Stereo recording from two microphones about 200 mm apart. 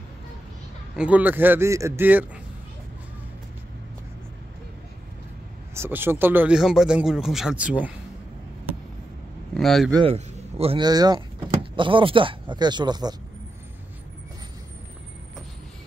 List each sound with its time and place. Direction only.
0.9 s a man's voice: 5° right (ahead or behind)
5.8 s speech: 10° right (ahead or behind)
9.5 s speech: centre (ahead or behind)
10.0 s speech: 30° right (ahead or behind)